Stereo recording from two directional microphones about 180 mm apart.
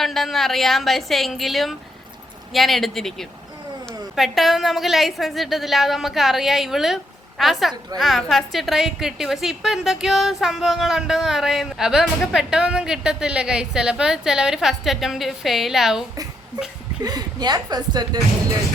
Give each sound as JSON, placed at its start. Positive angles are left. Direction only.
{"t": 0.0, "sound": "a woman's voice", "side_deg": 0}
{"t": 17.0, "sound": "a woman's voice", "side_deg": -20}